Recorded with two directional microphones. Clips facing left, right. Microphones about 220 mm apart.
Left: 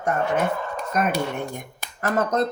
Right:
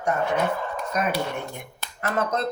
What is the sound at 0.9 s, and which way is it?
Speech, 50° left (ahead or behind).